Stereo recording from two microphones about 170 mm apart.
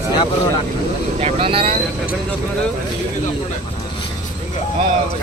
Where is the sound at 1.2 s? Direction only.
35° right (ahead or behind).